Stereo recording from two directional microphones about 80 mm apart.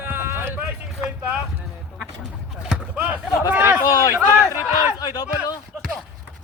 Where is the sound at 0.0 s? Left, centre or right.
Right.